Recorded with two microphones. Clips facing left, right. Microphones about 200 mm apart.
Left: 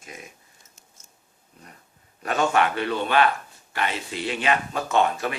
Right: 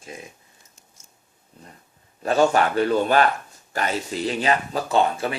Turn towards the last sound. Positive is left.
turn(degrees=-30)  # may be behind; listen again after turning